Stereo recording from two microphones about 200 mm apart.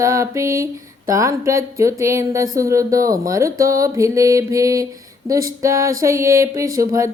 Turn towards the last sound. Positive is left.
turn(degrees=-15)  # may be behind; listen again after turning